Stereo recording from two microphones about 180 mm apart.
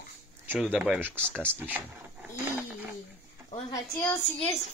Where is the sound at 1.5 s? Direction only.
10° right (ahead or behind).